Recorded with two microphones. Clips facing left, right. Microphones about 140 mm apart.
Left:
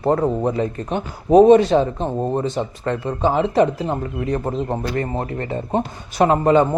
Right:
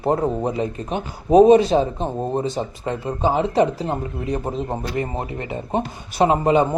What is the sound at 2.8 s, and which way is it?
Speech, 15° right (ahead or behind).